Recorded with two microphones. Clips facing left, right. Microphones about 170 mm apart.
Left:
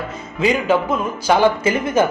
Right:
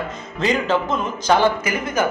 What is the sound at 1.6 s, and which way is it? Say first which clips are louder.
Speech: left 5 dB; 25° left (ahead or behind).